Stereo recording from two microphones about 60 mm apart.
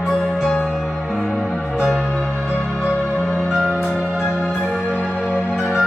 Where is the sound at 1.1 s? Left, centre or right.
Centre.